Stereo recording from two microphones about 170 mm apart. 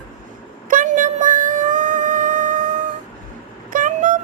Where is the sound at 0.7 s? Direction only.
50° right (ahead or behind).